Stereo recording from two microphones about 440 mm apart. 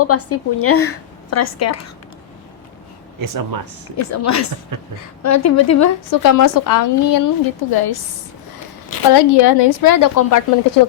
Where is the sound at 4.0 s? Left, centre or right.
Left.